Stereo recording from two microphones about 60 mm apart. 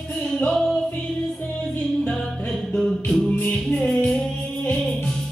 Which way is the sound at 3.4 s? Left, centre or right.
Left.